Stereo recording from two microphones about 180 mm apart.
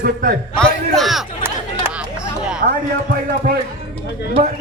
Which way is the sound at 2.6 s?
55° right (ahead or behind).